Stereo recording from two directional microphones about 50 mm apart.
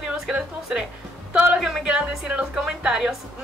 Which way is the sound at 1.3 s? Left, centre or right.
Right.